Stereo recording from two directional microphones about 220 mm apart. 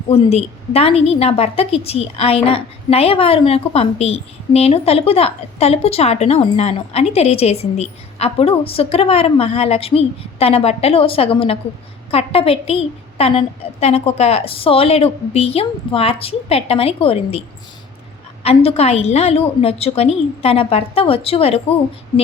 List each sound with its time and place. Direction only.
0.1 s a woman's voice: 30° left (ahead or behind)
18.4 s a woman's voice: 25° left (ahead or behind)